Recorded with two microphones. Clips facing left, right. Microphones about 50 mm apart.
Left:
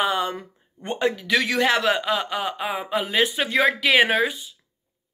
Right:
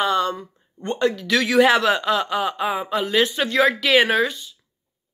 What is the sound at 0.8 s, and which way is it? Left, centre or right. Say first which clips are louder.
Speech: right 2 dB; centre.